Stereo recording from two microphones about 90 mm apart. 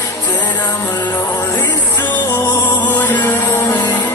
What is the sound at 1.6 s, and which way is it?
Music, 20° left (ahead or behind).